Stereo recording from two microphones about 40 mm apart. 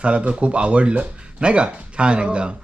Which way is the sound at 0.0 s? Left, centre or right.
Right.